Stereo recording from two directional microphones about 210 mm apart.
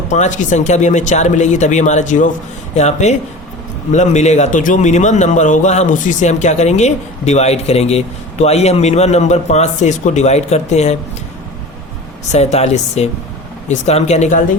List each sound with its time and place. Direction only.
0.1 s a man's voice: 35° left (ahead or behind)
12.3 s a man's voice: 30° left (ahead or behind)